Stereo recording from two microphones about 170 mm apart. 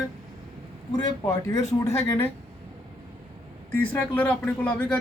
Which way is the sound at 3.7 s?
10° left (ahead or behind).